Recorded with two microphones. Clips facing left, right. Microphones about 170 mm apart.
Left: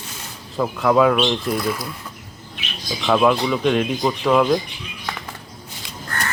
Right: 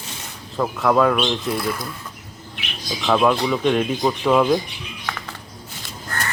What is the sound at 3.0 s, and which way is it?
Speech, centre (ahead or behind).